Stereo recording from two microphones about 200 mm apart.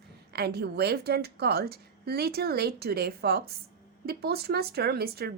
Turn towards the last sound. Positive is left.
turn(degrees=-50)  # may be behind; listen again after turning